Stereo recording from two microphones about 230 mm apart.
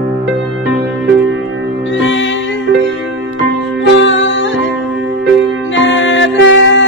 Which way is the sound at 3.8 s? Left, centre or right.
Left.